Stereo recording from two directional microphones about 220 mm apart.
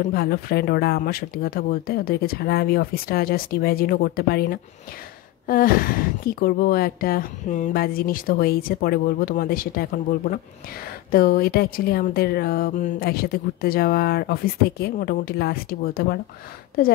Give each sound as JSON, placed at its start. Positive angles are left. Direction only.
{"t": 0.0, "sound": "a woman's voice", "side_deg": 45}
{"t": 11.1, "sound": "speech", "side_deg": 40}